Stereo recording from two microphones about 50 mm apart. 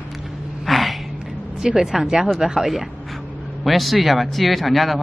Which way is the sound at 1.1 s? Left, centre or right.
Centre.